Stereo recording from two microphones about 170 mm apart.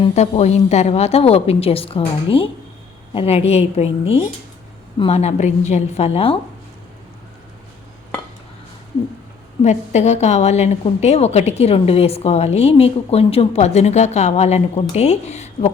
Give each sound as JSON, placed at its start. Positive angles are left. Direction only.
{"t": 0.2, "sound": "a woman's voice", "side_deg": 40}
{"t": 9.6, "sound": "a woman's voice", "side_deg": 40}